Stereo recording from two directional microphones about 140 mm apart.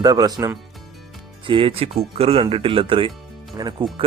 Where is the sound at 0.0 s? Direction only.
30° right (ahead or behind).